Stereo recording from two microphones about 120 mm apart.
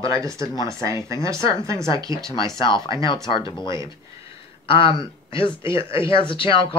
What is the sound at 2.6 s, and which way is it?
Speech, 40° left (ahead or behind).